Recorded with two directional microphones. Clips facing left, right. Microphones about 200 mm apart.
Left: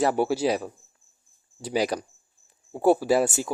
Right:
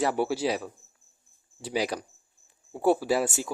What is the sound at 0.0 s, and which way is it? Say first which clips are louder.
Speech: left 3 dB; 45° left (ahead or behind).